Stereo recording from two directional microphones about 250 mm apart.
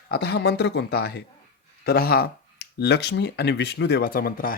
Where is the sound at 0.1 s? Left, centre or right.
Left.